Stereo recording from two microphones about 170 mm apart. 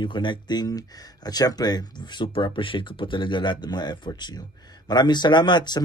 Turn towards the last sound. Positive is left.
turn(degrees=25)  # may be behind; listen again after turning